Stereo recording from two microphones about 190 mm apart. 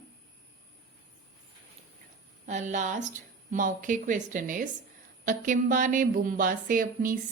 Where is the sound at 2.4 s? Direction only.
40° right (ahead or behind).